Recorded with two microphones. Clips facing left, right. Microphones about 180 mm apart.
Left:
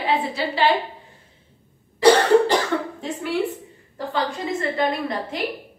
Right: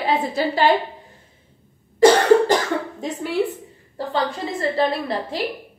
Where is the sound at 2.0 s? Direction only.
45° right (ahead or behind).